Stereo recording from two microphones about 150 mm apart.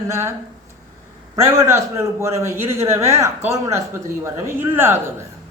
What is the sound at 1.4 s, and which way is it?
A man's voice, 20° right (ahead or behind).